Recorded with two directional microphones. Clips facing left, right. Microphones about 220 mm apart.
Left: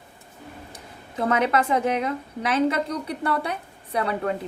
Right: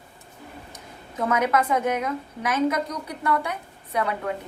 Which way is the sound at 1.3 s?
30° left (ahead or behind).